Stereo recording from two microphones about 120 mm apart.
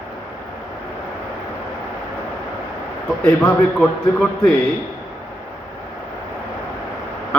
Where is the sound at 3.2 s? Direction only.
15° left (ahead or behind).